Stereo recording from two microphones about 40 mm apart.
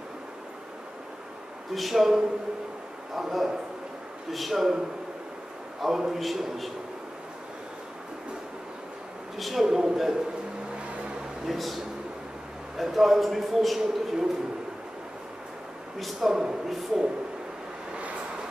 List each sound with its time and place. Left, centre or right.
1.7 s a man's voice: centre
5.8 s a man's voice: centre
9.4 s a man's voice: centre
11.4 s a man's voice: centre
16.0 s a man's voice: centre
16.3 s speech: centre
16.6 s a man's voice: centre